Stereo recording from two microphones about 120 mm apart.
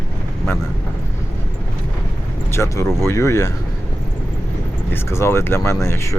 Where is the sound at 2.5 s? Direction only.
25° left (ahead or behind).